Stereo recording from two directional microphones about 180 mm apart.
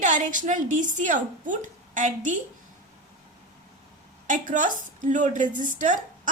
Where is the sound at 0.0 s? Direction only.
45° right (ahead or behind).